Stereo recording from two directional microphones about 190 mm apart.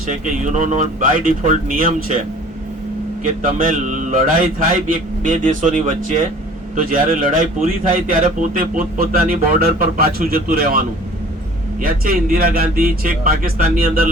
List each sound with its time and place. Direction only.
0.1 s speech: 40° right (ahead or behind)
3.2 s a man's voice: 45° right (ahead or behind)
11.8 s a man's voice: 50° right (ahead or behind)